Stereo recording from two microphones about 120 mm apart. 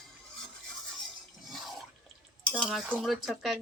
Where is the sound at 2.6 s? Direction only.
Centre (ahead or behind).